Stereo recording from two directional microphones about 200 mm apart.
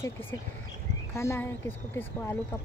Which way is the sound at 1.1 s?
15° left (ahead or behind).